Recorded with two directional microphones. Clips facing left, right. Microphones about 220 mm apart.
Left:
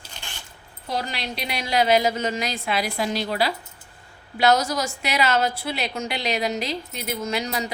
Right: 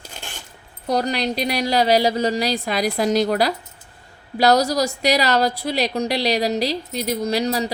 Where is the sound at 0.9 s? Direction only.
40° right (ahead or behind).